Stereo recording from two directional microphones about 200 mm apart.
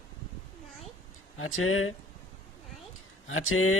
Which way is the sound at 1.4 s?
90° left.